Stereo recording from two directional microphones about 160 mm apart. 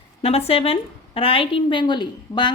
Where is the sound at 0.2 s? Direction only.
35° left (ahead or behind).